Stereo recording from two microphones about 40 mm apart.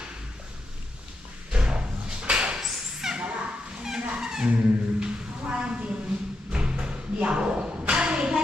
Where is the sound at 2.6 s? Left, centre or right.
Centre.